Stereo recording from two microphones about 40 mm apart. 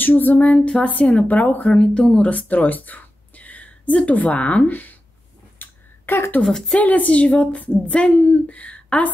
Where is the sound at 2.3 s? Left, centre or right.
Left.